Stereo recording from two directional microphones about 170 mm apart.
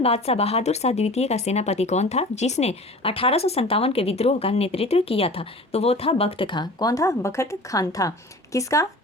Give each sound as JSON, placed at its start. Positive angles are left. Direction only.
{"t": 0.0, "sound": "speech", "side_deg": 35}